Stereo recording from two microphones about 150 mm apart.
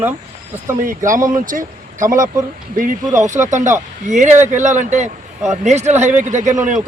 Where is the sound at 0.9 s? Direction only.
60° right (ahead or behind).